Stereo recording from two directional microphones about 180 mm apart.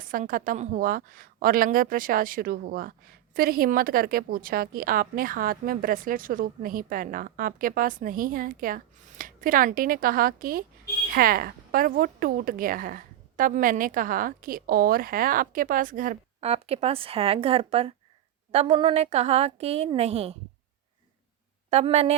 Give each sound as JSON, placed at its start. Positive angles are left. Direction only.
{"t": 0.0, "sound": "a woman's voice", "side_deg": -50}
{"t": 16.5, "sound": "a woman's voice", "side_deg": -35}
{"t": 21.7, "sound": "a woman's voice", "side_deg": -35}